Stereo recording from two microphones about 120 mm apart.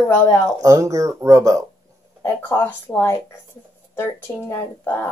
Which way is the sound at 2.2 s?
20° left (ahead or behind).